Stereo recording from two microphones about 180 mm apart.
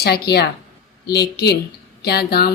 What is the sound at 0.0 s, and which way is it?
Speech, 65° left (ahead or behind).